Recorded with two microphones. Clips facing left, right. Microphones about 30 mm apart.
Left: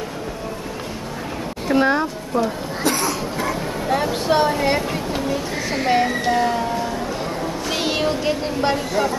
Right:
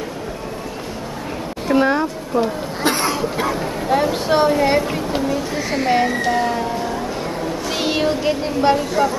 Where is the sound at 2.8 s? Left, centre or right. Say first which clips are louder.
Right 3 dB; right.